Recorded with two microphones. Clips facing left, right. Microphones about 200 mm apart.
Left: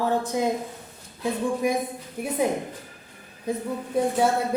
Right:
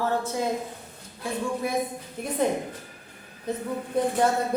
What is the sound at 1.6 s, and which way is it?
Speech, 15° left (ahead or behind).